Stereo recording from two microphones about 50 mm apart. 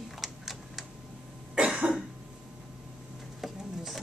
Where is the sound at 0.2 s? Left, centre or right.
Centre.